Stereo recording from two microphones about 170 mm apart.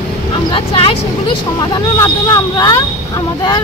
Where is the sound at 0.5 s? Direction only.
30° left (ahead or behind).